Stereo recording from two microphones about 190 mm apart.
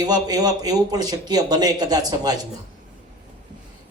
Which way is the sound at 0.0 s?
20° right (ahead or behind).